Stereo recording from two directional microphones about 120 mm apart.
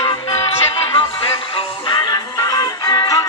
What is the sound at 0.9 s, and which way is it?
Music, 45° left (ahead or behind).